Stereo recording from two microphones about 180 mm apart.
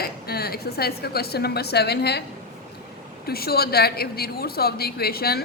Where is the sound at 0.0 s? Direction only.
60° left (ahead or behind).